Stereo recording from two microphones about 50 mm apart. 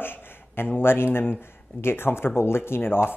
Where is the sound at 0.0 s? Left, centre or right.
Left.